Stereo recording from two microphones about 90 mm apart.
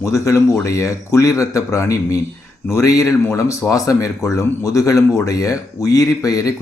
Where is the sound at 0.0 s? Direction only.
35° left (ahead or behind).